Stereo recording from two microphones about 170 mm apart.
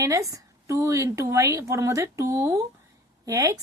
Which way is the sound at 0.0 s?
20° right (ahead or behind).